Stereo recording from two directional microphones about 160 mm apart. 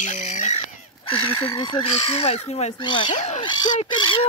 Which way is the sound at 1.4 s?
30° left (ahead or behind).